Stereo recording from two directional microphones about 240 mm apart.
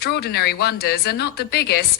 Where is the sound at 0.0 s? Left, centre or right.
Left.